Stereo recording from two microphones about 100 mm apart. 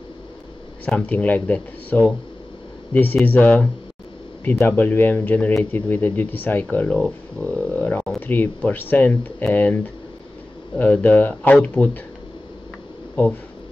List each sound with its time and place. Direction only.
0.8 s speech: 15° left (ahead or behind)
10.8 s speech: 15° left (ahead or behind)